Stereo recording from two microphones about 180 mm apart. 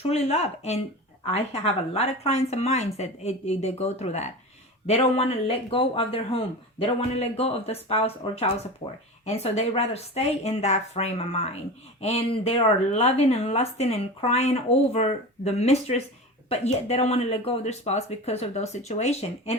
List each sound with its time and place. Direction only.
0.0 s speech: 35° left (ahead or behind)